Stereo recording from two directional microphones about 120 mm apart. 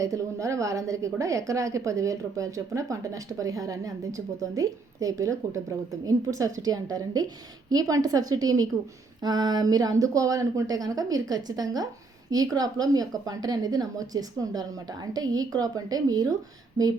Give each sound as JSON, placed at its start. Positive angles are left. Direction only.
{"t": 0.0, "sound": "a woman's voice", "side_deg": -25}